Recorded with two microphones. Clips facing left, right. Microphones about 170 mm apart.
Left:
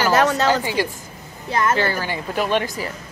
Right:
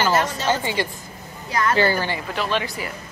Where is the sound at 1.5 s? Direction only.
25° left (ahead or behind).